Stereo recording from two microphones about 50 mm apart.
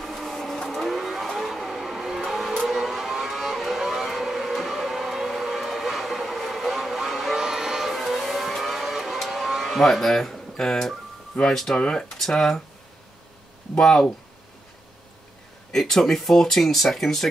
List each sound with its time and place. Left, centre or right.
0.0 s vehicle: centre
11.4 s speech: centre
13.7 s speech: centre
15.7 s speech: centre